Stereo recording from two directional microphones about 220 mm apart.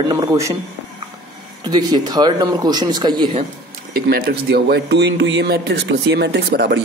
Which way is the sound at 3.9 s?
45° right (ahead or behind).